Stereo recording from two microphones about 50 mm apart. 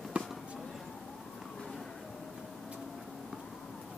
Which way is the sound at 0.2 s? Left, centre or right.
Right.